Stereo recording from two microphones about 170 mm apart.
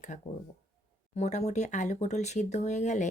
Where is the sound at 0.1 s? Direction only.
45° left (ahead or behind).